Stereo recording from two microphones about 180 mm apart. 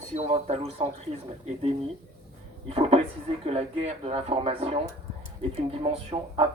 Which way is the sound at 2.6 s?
30° right (ahead or behind).